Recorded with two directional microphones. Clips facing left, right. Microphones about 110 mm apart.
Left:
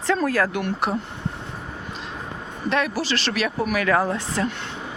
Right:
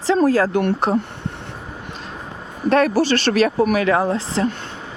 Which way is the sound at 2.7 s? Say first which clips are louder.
Right 8 dB; 45° right (ahead or behind).